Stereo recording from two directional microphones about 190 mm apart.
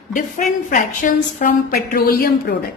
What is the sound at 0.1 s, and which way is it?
A woman's voice, 45° left (ahead or behind).